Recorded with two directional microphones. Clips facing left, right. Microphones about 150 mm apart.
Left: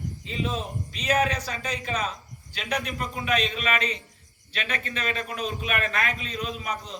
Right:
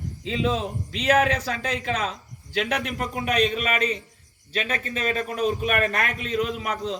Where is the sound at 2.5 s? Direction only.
75° right (ahead or behind).